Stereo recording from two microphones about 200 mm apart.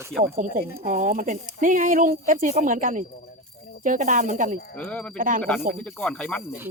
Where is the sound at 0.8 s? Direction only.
40° right (ahead or behind).